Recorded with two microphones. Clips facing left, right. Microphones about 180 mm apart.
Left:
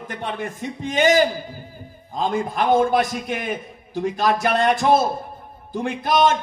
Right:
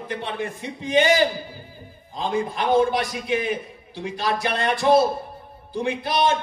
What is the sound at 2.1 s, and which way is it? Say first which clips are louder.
A man's voice: left 2 dB; 50° left (ahead or behind).